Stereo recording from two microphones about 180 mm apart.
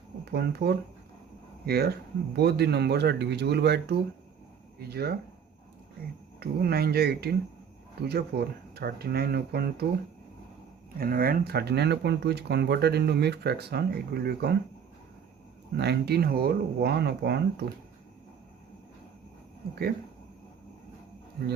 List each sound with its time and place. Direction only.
0.3 s speech: 65° right (ahead or behind)
6.4 s speech: 60° right (ahead or behind)
10.9 s speech: 55° right (ahead or behind)
15.8 s speech: 65° right (ahead or behind)
21.4 s speech: 65° right (ahead or behind)